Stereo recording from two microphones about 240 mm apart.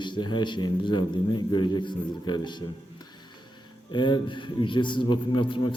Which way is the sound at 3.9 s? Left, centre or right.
Centre.